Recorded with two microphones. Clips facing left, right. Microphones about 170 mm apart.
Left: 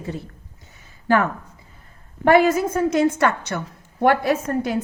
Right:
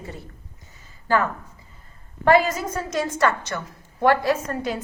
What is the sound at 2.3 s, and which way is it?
A woman's voice, 55° left (ahead or behind).